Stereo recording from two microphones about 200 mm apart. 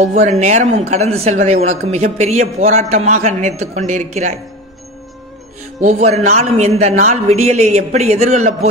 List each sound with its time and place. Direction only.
0.0 s speech: 35° right (ahead or behind)
5.8 s speech: 35° right (ahead or behind)